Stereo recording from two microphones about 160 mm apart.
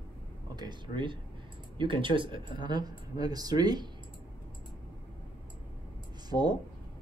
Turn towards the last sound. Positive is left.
turn(degrees=-25)  # may be behind; listen again after turning